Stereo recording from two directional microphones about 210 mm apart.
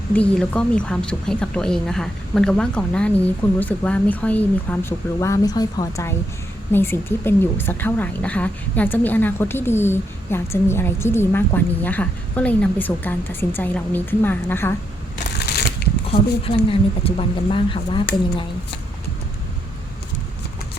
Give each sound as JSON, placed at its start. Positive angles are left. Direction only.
{"t": 0.1, "sound": "speech", "side_deg": 5}
{"t": 15.4, "sound": "a sound", "side_deg": 50}
{"t": 16.6, "sound": "speech", "side_deg": 25}